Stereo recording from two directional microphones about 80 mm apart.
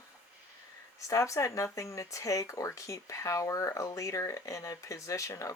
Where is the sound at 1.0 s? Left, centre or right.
Left.